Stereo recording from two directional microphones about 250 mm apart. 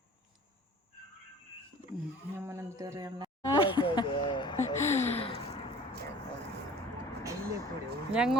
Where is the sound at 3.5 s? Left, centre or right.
Centre.